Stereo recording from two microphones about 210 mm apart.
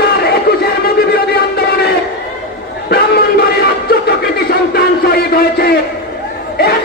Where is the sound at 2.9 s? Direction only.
50° left (ahead or behind).